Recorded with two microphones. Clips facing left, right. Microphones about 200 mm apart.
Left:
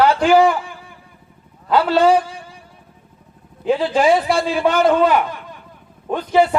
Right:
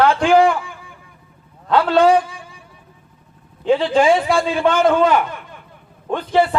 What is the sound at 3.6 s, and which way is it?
A man's voice, 5° left (ahead or behind).